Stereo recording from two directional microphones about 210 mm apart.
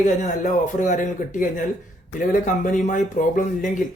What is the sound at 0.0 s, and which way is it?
Speech, 35° left (ahead or behind).